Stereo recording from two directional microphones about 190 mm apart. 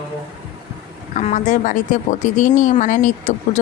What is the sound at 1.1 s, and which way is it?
Speech, 40° left (ahead or behind).